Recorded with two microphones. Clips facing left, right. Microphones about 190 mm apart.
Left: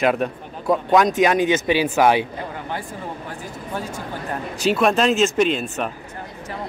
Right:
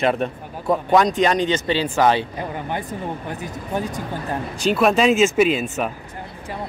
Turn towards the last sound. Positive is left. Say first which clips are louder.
# right 2 dB
turn(degrees=-5)  # may be behind; listen again after turning